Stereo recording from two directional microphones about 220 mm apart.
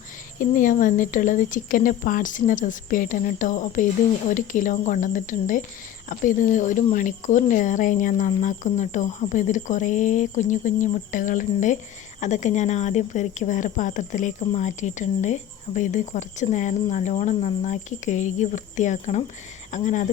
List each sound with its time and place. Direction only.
0.3 s speech: 40° left (ahead or behind)